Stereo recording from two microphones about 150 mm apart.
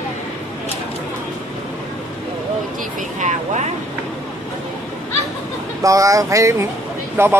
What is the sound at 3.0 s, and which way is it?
Speech, 55° right (ahead or behind).